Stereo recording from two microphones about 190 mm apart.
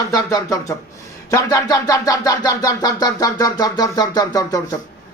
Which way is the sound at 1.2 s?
15° left (ahead or behind).